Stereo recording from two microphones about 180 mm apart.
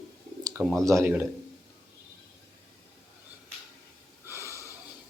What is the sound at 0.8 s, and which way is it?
Speech, 15° right (ahead or behind).